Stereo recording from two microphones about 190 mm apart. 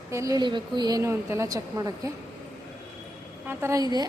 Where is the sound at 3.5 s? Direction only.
15° right (ahead or behind).